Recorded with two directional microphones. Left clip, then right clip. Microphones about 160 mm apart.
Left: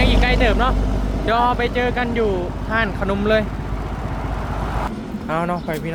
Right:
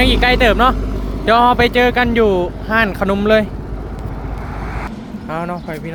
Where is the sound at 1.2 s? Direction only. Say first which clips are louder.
Right 7 dB; 55° right (ahead or behind); by 2.4 s 70° right (ahead or behind).